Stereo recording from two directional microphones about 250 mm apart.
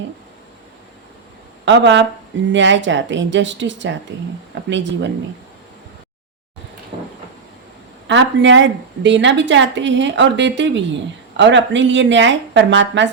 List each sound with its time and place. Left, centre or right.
1.6 s a woman's voice: right
8.0 s a woman's voice: right